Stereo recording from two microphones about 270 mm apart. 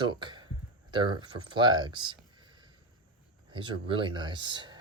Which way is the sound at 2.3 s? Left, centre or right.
Centre.